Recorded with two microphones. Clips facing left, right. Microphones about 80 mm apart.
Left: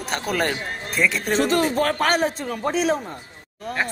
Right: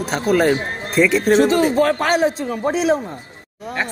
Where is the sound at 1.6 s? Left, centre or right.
Right.